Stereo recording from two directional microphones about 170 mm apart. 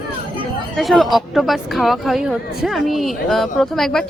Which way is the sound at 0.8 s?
Centre (ahead or behind).